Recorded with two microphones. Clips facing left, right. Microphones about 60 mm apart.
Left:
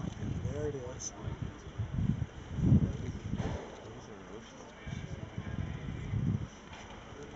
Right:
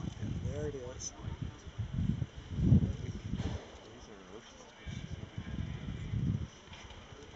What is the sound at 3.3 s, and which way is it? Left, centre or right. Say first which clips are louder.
Thump: left 3 dB; centre.